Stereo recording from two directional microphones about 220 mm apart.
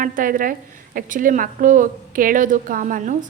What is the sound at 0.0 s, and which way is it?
A woman's voice, 40° right (ahead or behind).